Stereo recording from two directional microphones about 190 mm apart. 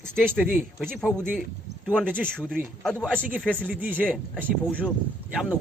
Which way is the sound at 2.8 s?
5° left (ahead or behind).